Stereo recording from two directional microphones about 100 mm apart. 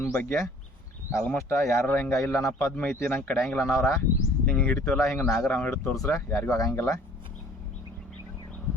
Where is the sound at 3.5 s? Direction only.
25° left (ahead or behind).